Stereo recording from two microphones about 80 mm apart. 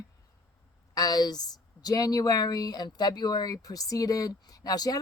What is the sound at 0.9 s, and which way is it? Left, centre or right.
A woman's voice, left.